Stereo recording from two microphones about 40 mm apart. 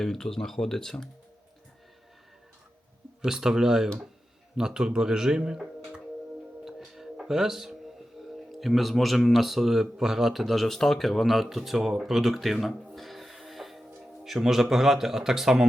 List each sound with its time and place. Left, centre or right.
0.0 s speech: centre
3.2 s a man's voice: centre
5.5 s music: right
6.7 s music: centre
8.2 s a sound: centre
8.5 s speech: centre
10.4 s speech: centre
12.0 s music: centre
14.3 s a man's voice: centre